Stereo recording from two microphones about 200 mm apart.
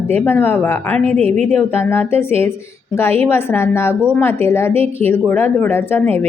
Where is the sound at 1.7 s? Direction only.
10° left (ahead or behind).